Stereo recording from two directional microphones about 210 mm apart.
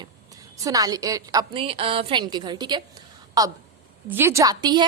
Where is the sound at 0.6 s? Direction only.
15° right (ahead or behind).